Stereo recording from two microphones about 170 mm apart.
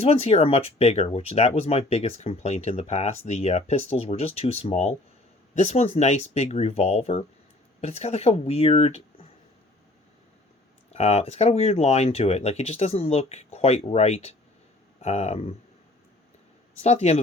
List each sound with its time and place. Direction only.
0.0 s speech: 35° left (ahead or behind)
10.9 s speech: 40° left (ahead or behind)
16.8 s speech: 40° left (ahead or behind)